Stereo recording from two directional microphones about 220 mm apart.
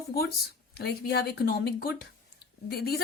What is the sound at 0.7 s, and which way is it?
A woman's voice, 45° left (ahead or behind).